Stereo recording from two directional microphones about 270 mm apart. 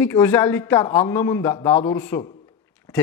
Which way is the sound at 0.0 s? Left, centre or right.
Centre.